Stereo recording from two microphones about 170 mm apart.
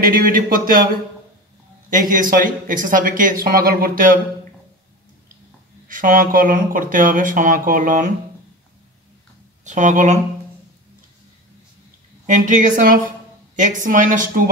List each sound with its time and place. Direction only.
0.0 s speech: 55° right (ahead or behind)
1.9 s speech: 55° right (ahead or behind)
5.9 s speech: 50° right (ahead or behind)
9.7 s speech: 45° right (ahead or behind)
12.3 s speech: 50° right (ahead or behind)